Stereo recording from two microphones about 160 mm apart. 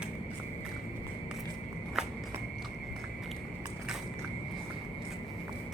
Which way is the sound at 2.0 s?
5° right (ahead or behind).